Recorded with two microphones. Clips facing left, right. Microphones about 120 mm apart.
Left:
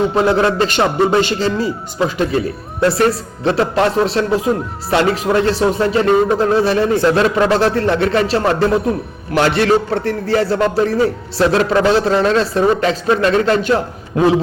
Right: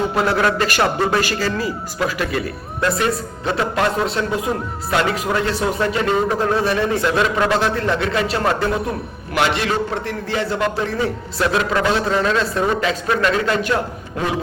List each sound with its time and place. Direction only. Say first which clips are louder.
0.1 s a man's voice: left 4 dB; 25° left (ahead or behind)
3.4 s a man's voice: left 5 dB; 30° left (ahead or behind)